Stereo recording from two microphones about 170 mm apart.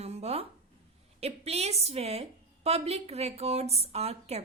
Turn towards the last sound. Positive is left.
turn(degrees=-40)  # may be behind; listen again after turning